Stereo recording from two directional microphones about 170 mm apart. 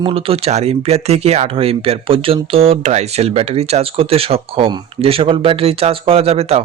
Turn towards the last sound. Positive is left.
turn(degrees=-35)  # may be behind; listen again after turning